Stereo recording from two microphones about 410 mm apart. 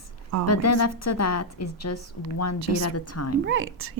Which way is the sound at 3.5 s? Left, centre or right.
Right.